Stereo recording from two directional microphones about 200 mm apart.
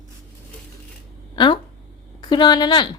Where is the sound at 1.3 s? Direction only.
25° left (ahead or behind).